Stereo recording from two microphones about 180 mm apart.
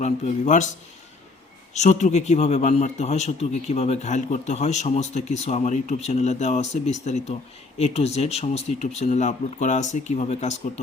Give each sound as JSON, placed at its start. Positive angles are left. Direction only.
{"t": 0.0, "sound": "speech", "side_deg": 40}
{"t": 1.7, "sound": "a man's voice", "side_deg": 40}